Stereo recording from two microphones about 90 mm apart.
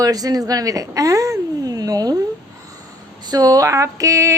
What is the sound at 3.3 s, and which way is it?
Speech, 45° right (ahead or behind).